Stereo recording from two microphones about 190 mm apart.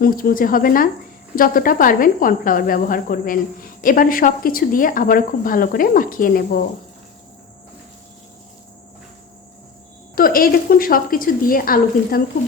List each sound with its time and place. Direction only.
0.0 s speech: 50° left (ahead or behind)
10.2 s speech: 50° left (ahead or behind)